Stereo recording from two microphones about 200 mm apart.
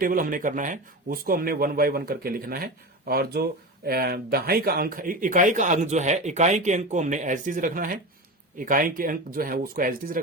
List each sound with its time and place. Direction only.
0.0 s speech: 45° right (ahead or behind)